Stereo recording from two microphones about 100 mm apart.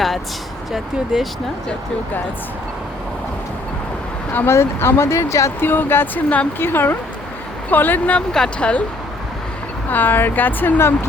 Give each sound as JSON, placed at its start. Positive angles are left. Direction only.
{"t": 0.7, "sound": "speech", "side_deg": -5}
{"t": 4.4, "sound": "speech", "side_deg": 25}
{"t": 9.9, "sound": "speech", "side_deg": 20}